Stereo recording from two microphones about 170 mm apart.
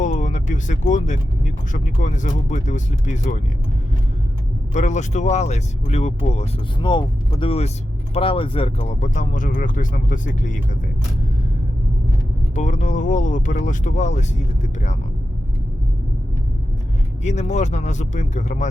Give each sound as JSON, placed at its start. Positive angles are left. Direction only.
{"t": 0.0, "sound": "speech", "side_deg": 45}
{"t": 4.7, "sound": "speech", "side_deg": 45}
{"t": 6.8, "sound": "speech", "side_deg": 25}
{"t": 12.5, "sound": "speech", "side_deg": 45}
{"t": 17.2, "sound": "speech", "side_deg": 45}